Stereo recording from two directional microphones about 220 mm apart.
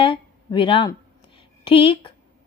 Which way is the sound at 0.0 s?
25° left (ahead or behind).